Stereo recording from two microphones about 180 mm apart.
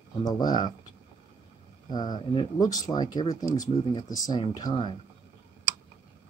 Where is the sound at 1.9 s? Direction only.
25° left (ahead or behind).